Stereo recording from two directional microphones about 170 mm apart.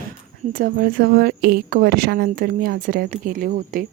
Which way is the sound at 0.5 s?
55° right (ahead or behind).